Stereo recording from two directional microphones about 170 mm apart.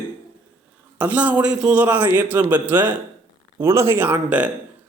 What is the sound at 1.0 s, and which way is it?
A man's voice, 10° right (ahead or behind).